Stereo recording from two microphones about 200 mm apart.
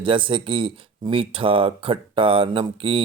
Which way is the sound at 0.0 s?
25° right (ahead or behind).